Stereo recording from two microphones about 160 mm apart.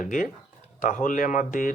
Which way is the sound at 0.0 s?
55° left (ahead or behind).